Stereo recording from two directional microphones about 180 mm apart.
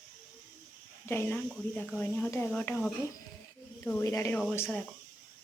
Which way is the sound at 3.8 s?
15° left (ahead or behind).